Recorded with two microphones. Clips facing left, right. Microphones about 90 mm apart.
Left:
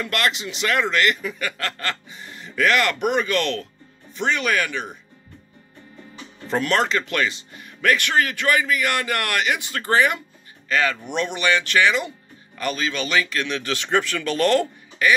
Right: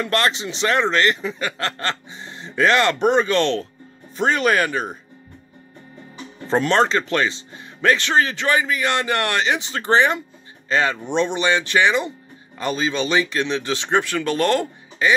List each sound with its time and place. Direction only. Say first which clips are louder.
0.0 s a man's voice: right 3 dB; 30° right (ahead or behind)
6.4 s speech: right 4 dB; 30° right (ahead or behind)